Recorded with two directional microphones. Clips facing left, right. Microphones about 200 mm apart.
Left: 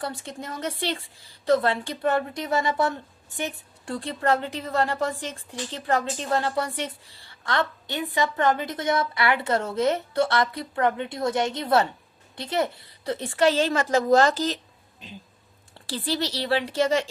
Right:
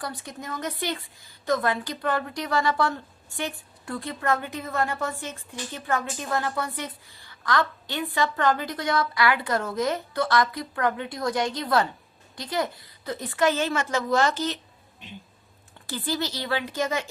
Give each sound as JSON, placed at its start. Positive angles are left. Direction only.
{"t": 0.0, "sound": "a woman's voice", "side_deg": 25}
{"t": 3.9, "sound": "a woman's voice", "side_deg": 30}
{"t": 16.0, "sound": "a woman's voice", "side_deg": 30}